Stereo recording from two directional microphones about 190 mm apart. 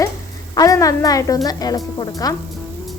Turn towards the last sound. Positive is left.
turn(degrees=20)  # may be behind; listen again after turning